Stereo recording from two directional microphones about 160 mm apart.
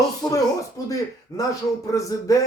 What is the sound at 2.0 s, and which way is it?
Speech, 20° left (ahead or behind).